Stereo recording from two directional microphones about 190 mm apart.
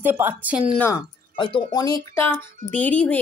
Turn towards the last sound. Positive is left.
turn(degrees=10)  # may be behind; listen again after turning